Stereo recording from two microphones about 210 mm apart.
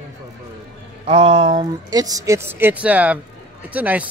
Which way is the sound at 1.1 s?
30° right (ahead or behind).